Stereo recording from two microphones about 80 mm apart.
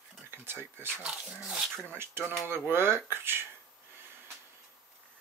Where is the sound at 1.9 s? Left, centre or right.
Right.